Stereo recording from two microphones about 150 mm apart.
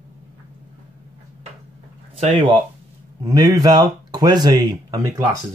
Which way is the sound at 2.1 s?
40° right (ahead or behind).